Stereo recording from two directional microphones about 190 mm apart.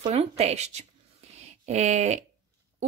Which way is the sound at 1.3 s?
35° right (ahead or behind).